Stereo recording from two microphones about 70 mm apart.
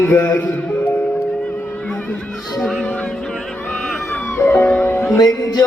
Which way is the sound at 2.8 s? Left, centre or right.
Centre.